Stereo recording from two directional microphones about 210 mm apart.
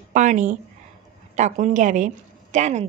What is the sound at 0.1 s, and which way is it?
A woman's voice, 35° right (ahead or behind).